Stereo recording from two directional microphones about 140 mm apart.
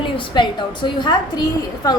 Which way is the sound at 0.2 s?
35° left (ahead or behind).